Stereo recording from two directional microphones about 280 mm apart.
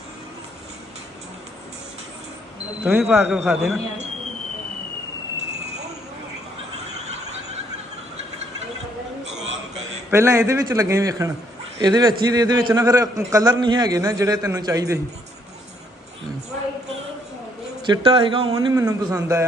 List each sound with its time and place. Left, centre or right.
2.8 s speech: centre
10.1 s a man's voice: centre
17.8 s a man's voice: centre